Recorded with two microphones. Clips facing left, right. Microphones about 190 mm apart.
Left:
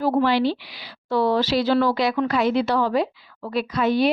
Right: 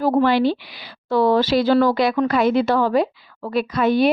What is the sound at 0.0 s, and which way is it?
A woman's voice, 50° right (ahead or behind).